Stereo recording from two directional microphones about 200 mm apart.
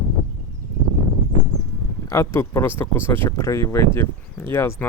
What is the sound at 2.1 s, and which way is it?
Speech, 15° left (ahead or behind).